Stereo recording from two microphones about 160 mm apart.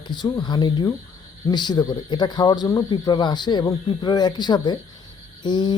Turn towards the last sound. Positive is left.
turn(degrees=25)  # may be behind; listen again after turning